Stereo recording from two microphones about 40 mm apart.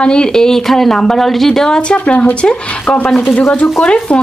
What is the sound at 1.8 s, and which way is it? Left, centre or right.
Speech, left.